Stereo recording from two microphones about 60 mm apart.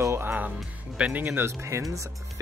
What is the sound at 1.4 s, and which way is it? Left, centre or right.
Speech, right.